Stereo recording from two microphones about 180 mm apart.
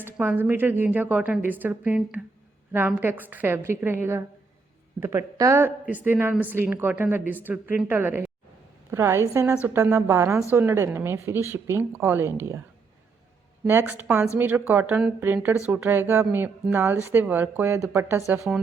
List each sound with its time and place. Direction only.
0.0 s speech: 10° right (ahead or behind)
13.7 s speech: 10° right (ahead or behind)
18.3 s speech: 5° right (ahead or behind)